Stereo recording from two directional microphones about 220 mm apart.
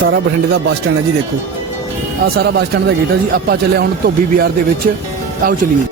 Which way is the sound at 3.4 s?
45° right (ahead or behind).